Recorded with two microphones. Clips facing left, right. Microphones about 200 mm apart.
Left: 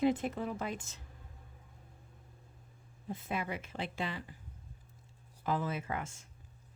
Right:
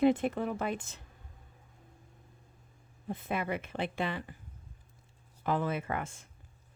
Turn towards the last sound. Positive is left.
turn(degrees=-60)  # may be behind; listen again after turning